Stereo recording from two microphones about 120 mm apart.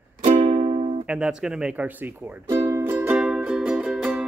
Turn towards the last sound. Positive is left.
turn(degrees=-5)  # may be behind; listen again after turning